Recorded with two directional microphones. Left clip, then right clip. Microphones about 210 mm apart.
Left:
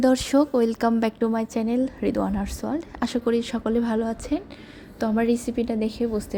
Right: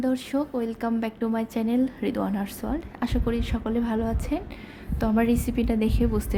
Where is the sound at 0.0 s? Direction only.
30° left (ahead or behind).